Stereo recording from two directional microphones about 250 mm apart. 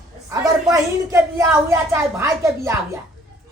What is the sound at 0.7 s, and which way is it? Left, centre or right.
A woman's voice, centre.